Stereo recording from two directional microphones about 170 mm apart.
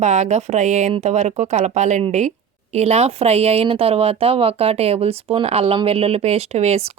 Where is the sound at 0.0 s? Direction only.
45° right (ahead or behind).